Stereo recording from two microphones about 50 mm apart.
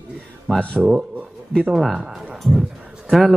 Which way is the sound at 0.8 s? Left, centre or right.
Centre.